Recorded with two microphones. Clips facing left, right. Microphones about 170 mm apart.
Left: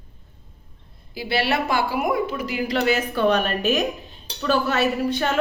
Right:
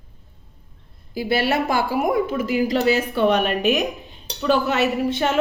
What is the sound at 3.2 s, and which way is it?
A woman's voice, 20° right (ahead or behind).